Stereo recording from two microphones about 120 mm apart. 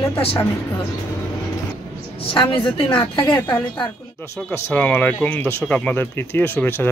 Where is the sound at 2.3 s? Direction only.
45° left (ahead or behind).